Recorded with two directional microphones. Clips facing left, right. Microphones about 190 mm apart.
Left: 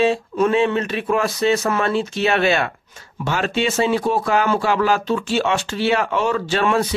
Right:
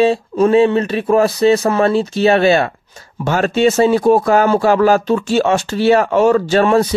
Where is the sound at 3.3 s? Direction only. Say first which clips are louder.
Right 7 dB; 45° right (ahead or behind).